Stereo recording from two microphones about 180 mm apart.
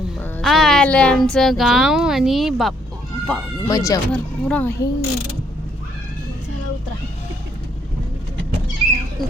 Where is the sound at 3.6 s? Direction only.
20° left (ahead or behind).